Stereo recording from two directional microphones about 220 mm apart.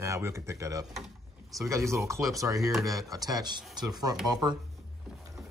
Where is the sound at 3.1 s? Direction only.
15° right (ahead or behind).